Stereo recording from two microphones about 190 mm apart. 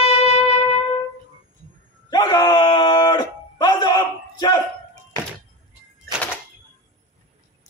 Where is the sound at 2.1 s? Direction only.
20° left (ahead or behind).